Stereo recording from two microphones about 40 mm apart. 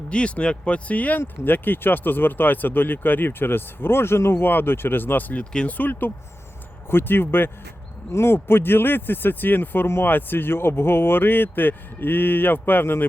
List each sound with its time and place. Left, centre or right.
0.1 s speech: left
5.3 s speech: left
5.7 s speech: left
6.9 s speech: left
8.2 s speech: left
10.1 s speech: left